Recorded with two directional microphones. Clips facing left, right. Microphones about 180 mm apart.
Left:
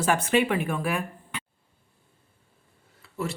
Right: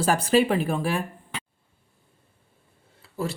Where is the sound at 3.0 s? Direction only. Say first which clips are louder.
Right 2 dB; 35° right (ahead or behind).